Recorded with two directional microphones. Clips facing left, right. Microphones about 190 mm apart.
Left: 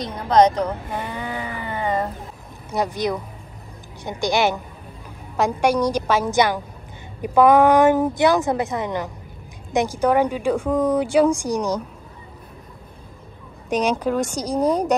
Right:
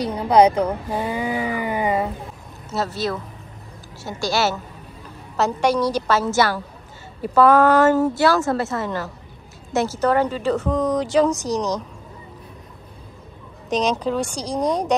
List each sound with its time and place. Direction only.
0.0 s speech: 10° right (ahead or behind)
2.7 s speech: 15° left (ahead or behind)
13.7 s speech: 10° left (ahead or behind)